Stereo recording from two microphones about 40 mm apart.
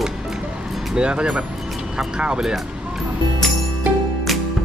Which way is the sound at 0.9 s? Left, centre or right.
Right.